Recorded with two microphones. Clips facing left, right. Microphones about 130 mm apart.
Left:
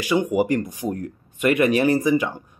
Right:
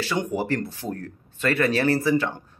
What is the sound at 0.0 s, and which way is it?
A man's voice, 10° left (ahead or behind).